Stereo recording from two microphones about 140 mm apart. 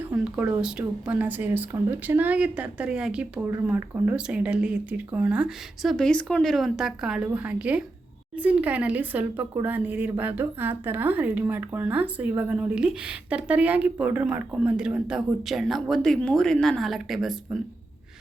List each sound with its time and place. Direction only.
0.1 s speech: 10° right (ahead or behind)